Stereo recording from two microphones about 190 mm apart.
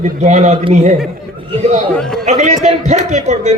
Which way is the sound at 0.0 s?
40° right (ahead or behind).